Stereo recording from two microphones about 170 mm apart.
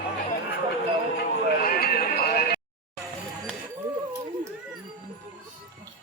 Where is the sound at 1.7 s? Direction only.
60° left (ahead or behind).